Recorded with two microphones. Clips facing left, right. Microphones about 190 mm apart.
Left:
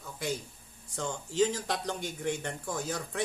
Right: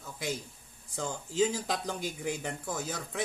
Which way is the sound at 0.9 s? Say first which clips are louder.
Even; 5° right (ahead or behind).